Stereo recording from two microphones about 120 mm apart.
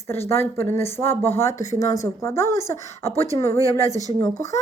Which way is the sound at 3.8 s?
70° left (ahead or behind).